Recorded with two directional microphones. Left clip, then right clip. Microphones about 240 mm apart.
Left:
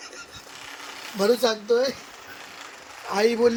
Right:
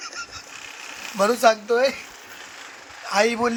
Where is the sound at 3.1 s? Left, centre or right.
Centre.